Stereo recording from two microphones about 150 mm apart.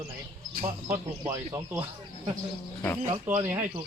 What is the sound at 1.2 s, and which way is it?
Speech, 20° right (ahead or behind).